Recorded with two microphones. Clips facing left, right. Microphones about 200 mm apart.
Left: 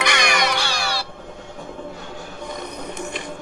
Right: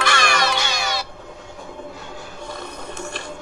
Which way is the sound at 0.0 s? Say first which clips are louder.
Even; 15° left (ahead or behind).